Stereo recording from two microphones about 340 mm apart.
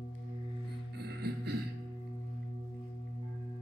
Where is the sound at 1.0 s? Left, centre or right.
Right.